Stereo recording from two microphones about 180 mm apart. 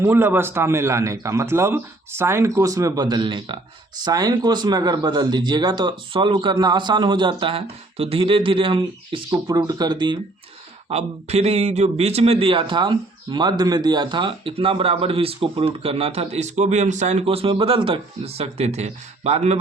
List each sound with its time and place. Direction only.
0.0 s a man's voice: 10° right (ahead or behind)
10.8 s a man's voice: 35° right (ahead or behind)